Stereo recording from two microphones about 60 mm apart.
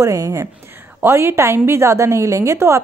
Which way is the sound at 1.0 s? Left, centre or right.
Right.